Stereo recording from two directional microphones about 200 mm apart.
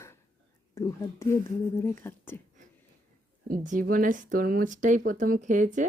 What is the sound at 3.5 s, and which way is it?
Speech, 40° right (ahead or behind).